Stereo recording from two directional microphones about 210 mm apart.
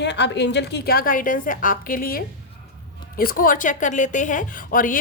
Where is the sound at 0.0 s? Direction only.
55° left (ahead or behind).